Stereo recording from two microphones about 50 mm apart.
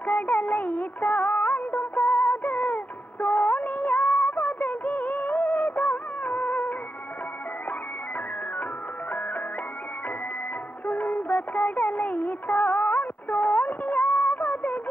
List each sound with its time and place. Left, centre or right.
0.0 s music of bollywood: left
10.9 s music: left